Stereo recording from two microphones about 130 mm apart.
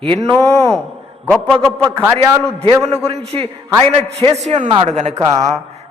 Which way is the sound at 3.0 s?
50° right (ahead or behind).